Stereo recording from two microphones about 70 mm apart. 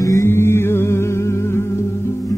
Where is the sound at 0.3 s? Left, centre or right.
Left.